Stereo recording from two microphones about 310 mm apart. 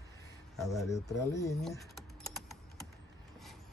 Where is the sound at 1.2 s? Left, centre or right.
Centre.